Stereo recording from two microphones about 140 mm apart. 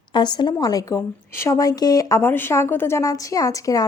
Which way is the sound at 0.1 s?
30° left (ahead or behind).